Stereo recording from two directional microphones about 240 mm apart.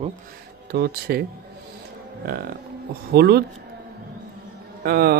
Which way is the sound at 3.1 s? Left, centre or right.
Right.